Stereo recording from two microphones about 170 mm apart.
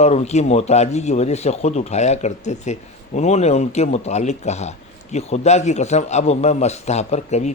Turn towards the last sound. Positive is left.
turn(degrees=40)  # may be behind; listen again after turning